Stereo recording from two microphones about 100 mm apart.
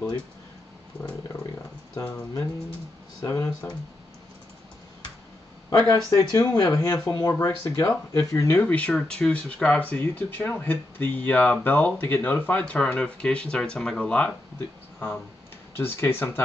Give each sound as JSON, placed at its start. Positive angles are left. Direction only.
{"t": 2.0, "sound": "speech", "side_deg": 30}
{"t": 6.0, "sound": "speech", "side_deg": 35}
{"t": 8.7, "sound": "speech", "side_deg": 10}
{"t": 15.7, "sound": "speech", "side_deg": 25}